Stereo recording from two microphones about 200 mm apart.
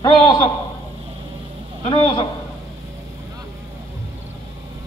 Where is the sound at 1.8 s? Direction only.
25° left (ahead or behind).